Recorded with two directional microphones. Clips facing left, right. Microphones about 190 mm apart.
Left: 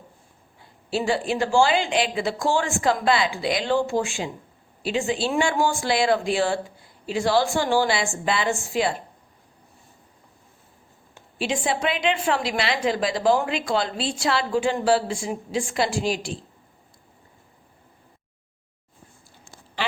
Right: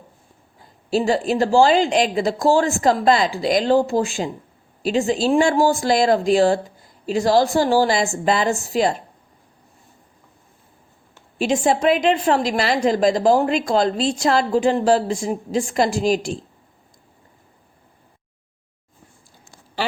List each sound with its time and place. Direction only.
0.6 s a woman's voice: 40° right (ahead or behind)
11.3 s a woman's voice: 40° right (ahead or behind)